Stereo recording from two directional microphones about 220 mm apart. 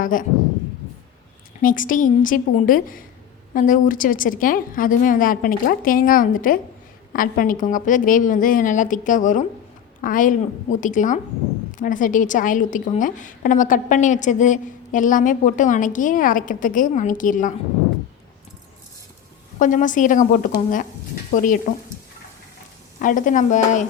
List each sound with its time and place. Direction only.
0.0 s a woman's voice: 35° left (ahead or behind)
1.6 s a woman's voice: 35° left (ahead or behind)
19.5 s a woman's voice: 35° left (ahead or behind)
23.0 s a woman's voice: 35° left (ahead or behind)